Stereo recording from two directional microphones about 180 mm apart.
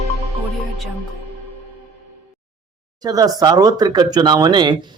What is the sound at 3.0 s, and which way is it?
Speech, 20° right (ahead or behind).